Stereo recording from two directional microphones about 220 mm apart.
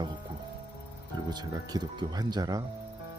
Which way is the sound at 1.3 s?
20° right (ahead or behind).